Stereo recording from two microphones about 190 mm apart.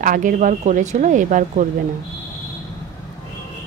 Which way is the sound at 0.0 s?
45° right (ahead or behind).